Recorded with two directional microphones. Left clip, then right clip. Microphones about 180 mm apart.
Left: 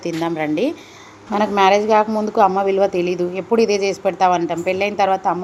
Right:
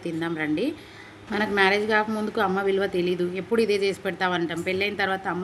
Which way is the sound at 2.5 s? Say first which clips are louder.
Left 8 dB; 5° left (ahead or behind).